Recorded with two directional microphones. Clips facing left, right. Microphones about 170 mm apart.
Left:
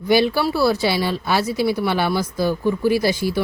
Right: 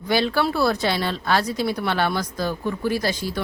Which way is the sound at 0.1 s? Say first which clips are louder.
Left 4 dB; 10° left (ahead or behind).